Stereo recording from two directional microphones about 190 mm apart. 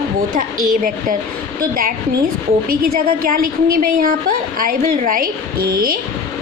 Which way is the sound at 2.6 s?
50° right (ahead or behind).